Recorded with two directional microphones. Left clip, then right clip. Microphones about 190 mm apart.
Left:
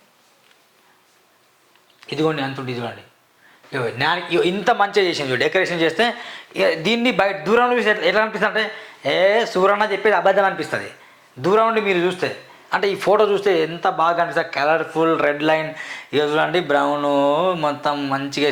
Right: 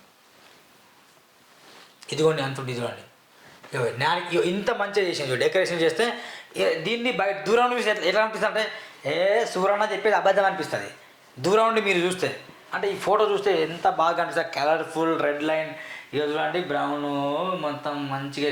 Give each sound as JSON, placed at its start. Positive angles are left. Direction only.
{"t": 2.0, "sound": "a man's voice", "side_deg": 20}
{"t": 3.7, "sound": "a man's voice", "side_deg": 30}
{"t": 6.8, "sound": "mantra", "side_deg": 45}
{"t": 7.4, "sound": "a man's voice", "side_deg": 25}
{"t": 9.0, "sound": "a man's voice", "side_deg": 40}
{"t": 11.4, "sound": "a man's voice", "side_deg": 20}
{"t": 12.7, "sound": "a man's voice", "side_deg": 40}
{"t": 15.4, "sound": "mantra", "side_deg": 50}